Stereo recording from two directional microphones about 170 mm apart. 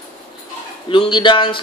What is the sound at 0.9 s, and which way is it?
Speech, 30° left (ahead or behind).